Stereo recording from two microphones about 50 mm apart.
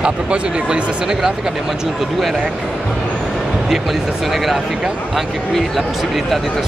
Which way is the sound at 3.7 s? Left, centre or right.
Centre.